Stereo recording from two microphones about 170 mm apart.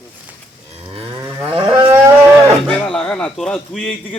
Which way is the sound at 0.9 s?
30° right (ahead or behind).